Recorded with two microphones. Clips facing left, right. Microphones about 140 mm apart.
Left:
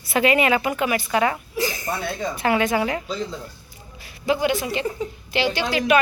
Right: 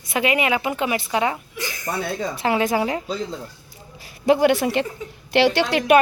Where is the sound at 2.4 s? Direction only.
30° right (ahead or behind).